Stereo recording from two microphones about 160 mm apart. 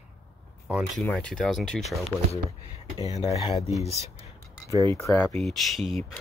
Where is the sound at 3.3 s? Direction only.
20° left (ahead or behind).